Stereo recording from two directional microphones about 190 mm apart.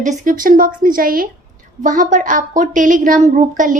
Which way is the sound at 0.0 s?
45° right (ahead or behind).